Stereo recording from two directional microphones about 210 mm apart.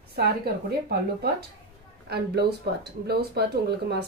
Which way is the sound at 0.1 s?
50° right (ahead or behind).